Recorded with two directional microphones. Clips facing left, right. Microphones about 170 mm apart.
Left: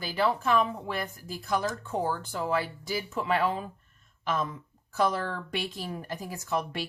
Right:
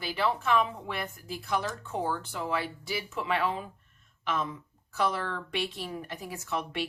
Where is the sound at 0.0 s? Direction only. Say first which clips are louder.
Left 2 dB; 40° left (ahead or behind).